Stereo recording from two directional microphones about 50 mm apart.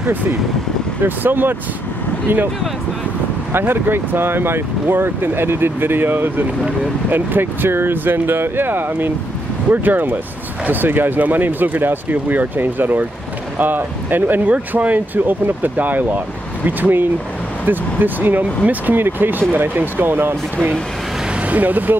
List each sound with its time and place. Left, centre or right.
1.0 s speech: right
3.5 s speech: right
14.5 s speech: right
21.5 s speech: right